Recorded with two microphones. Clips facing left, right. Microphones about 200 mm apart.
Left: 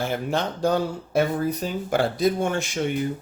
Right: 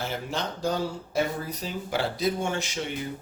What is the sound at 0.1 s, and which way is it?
Speech, 55° left (ahead or behind).